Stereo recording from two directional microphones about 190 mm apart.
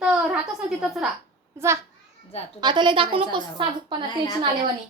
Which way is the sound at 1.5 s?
15° right (ahead or behind).